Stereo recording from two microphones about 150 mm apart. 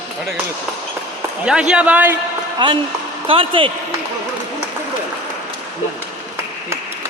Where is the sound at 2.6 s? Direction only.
35° right (ahead or behind).